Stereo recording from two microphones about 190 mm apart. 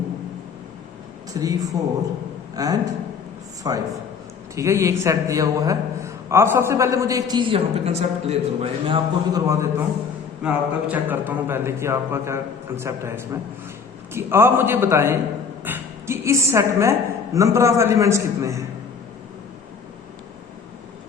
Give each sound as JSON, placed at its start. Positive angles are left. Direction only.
{"t": 1.3, "sound": "a man's voice", "side_deg": -20}